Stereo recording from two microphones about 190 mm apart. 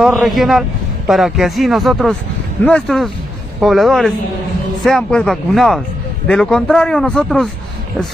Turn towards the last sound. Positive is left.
turn(degrees=5)  # may be behind; listen again after turning